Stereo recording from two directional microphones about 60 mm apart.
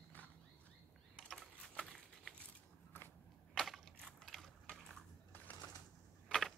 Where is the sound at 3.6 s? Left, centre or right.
Centre.